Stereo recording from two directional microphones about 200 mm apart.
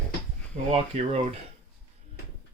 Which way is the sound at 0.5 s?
35° right (ahead or behind).